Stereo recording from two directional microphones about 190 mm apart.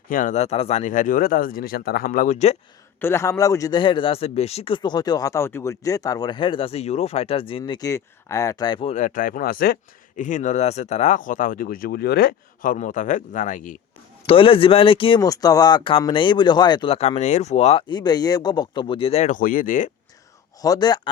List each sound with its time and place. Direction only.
0.1 s speech: 45° left (ahead or behind)
3.0 s a man's voice: 15° left (ahead or behind)
8.9 s speech: 40° left (ahead or behind)
14.3 s a man's voice: 30° left (ahead or behind); by 19.9 s 45° left (ahead or behind)
20.6 s a man's voice: 20° left (ahead or behind)